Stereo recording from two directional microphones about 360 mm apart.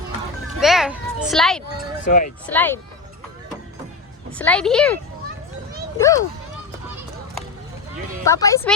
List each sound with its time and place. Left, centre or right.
0.6 s children playing: centre
1.3 s a woman's voice: centre
2.0 s speech: left
2.5 s a woman's voice: centre
4.3 s a woman's voice: centre
6.0 s speech: centre
8.2 s speech: centre